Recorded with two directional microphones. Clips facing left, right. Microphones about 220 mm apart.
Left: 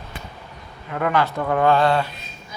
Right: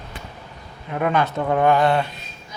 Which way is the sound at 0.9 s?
20° right (ahead or behind).